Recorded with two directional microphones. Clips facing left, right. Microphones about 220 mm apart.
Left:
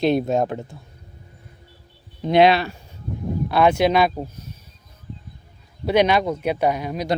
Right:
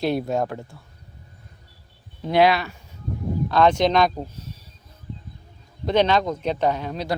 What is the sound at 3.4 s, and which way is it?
Speech, 10° left (ahead or behind).